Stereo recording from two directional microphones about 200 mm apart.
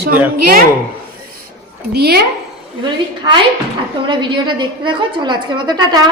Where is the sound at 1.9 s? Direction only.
50° right (ahead or behind).